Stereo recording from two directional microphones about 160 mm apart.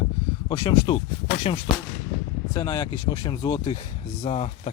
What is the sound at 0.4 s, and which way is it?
Speech, 30° left (ahead or behind).